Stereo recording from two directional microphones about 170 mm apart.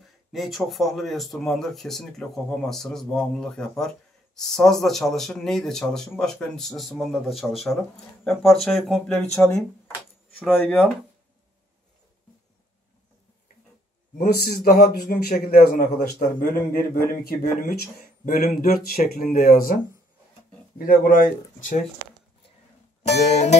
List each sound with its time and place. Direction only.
0.3 s speech: centre (ahead or behind)
10.6 s speech: centre (ahead or behind)
14.1 s speech: 60° left (ahead or behind)
23.1 s music: 40° left (ahead or behind)